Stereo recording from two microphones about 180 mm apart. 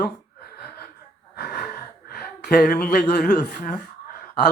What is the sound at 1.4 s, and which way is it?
Gasp, 55° left (ahead or behind).